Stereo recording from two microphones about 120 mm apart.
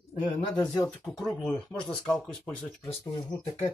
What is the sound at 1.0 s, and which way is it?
Speech, centre (ahead or behind).